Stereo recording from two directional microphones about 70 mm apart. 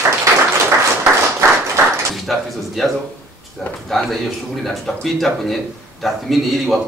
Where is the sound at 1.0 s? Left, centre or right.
Right.